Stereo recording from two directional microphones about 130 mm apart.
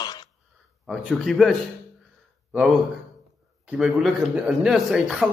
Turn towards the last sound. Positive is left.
turn(degrees=0)  # may be behind; listen again after turning